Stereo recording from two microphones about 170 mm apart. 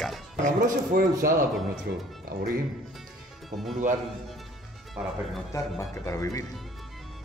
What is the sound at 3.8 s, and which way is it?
Speech, 45° right (ahead or behind).